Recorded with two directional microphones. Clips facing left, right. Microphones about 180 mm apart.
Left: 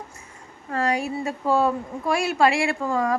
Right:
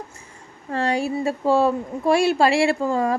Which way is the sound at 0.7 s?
30° right (ahead or behind).